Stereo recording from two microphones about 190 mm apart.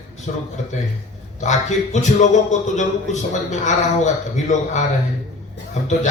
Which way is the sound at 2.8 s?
40° left (ahead or behind).